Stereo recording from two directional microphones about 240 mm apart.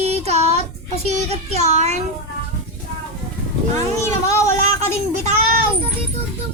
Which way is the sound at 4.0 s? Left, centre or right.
Centre.